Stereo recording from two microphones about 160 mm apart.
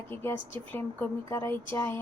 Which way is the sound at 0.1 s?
15° left (ahead or behind).